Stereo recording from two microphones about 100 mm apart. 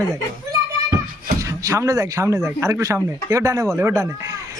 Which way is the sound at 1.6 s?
30° right (ahead or behind).